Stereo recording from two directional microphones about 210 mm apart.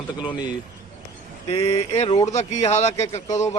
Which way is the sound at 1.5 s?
25° left (ahead or behind).